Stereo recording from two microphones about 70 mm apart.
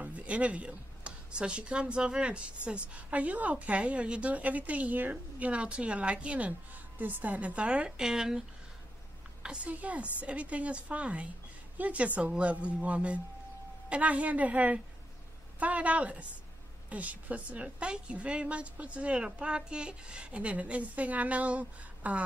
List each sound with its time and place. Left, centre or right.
0.0 s a woman's voice: centre